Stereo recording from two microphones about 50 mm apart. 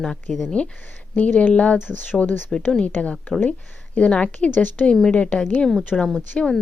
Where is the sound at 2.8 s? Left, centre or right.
Left.